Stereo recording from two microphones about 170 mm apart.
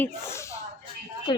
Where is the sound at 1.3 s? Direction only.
25° left (ahead or behind).